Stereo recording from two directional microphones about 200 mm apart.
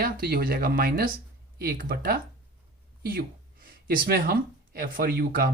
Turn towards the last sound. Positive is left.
turn(degrees=-50)  # may be behind; listen again after turning